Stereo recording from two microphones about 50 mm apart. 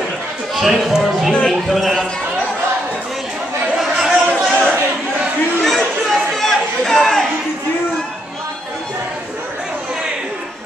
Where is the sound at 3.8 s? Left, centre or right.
Centre.